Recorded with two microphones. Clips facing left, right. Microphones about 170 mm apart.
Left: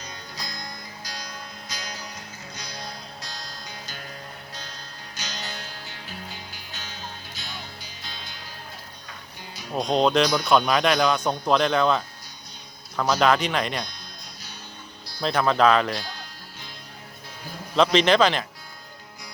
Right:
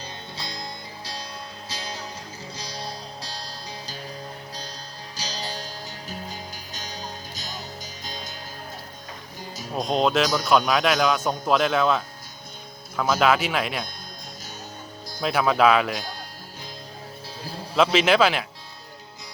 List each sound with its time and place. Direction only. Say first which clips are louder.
0.0 s music: right 2 dB; 30° right (ahead or behind)
5.1 s music: right 3 dB; 35° right (ahead or behind)
9.7 s speech: left 1 dB; centre (ahead or behind)
15.2 s speech: even; 5° right (ahead or behind)
17.9 s speech: left 1 dB; 5° right (ahead or behind)